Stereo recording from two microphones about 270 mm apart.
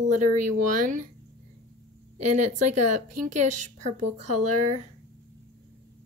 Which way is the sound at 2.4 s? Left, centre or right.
Right.